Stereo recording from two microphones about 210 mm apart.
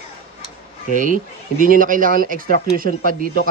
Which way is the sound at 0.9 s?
40° right (ahead or behind).